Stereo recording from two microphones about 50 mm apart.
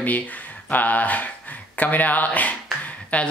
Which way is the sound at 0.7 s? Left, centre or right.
Left.